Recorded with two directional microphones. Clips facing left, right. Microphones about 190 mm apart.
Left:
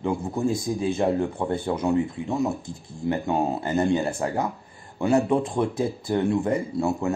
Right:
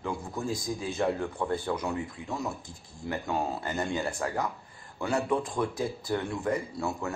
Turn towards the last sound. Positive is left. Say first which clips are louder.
# left 8 dB
turn(degrees=25)  # may be behind; listen again after turning